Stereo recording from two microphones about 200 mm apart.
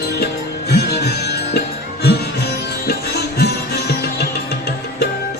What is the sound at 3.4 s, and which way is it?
Music, 55° left (ahead or behind).